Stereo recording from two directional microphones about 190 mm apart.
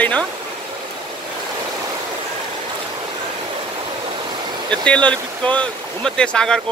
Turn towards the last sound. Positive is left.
turn(degrees=5)  # may be behind; listen again after turning